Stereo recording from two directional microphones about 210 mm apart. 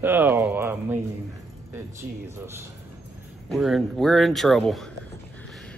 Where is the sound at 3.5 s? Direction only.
Centre (ahead or behind).